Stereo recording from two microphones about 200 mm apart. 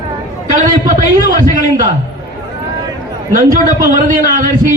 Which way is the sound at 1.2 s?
45° right (ahead or behind).